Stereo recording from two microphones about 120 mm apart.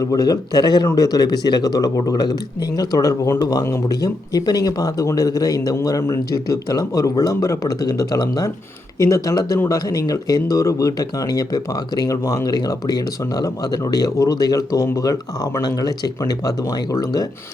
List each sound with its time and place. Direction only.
0.0 s speech: 30° left (ahead or behind)